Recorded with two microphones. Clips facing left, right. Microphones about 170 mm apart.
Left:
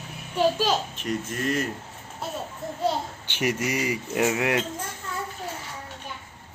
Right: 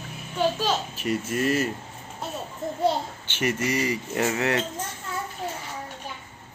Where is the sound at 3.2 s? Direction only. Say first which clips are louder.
Even; 15° left (ahead or behind).